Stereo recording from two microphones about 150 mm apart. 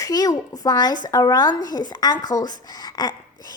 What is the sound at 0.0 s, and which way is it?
Speech, 25° left (ahead or behind).